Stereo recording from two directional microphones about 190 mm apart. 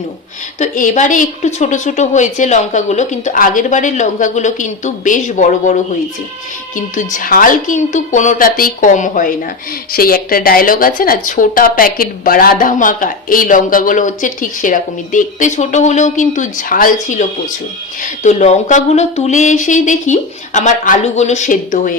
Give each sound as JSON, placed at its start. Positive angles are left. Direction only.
{"t": 0.6, "sound": "a woman's voice", "side_deg": 40}